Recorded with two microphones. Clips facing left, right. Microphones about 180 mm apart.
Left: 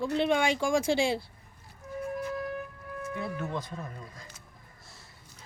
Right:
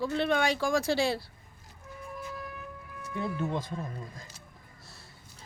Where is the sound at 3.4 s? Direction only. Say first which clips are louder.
Right 3 dB; 25° right (ahead or behind).